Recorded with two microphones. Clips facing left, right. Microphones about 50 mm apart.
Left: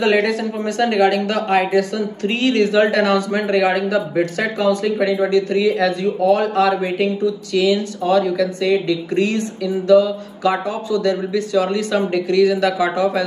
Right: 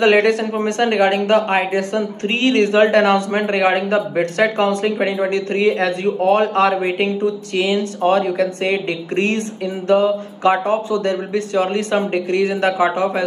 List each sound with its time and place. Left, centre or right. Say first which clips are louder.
0.0 s a man's voice: right 3 dB; right